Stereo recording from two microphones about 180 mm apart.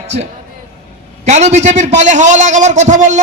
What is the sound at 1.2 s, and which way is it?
A man's voice, 40° right (ahead or behind).